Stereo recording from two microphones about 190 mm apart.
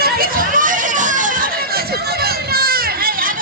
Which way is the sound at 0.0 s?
50° right (ahead or behind).